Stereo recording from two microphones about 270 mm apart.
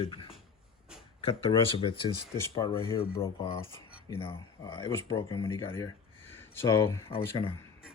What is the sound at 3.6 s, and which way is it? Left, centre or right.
Cutlery, centre.